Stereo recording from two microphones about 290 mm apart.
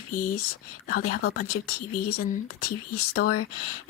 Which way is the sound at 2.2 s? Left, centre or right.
Left.